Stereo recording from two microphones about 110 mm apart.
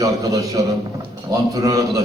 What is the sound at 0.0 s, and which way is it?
A man's voice, 30° right (ahead or behind).